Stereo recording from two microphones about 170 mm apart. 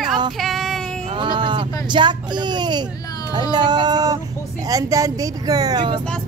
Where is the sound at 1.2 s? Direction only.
25° right (ahead or behind).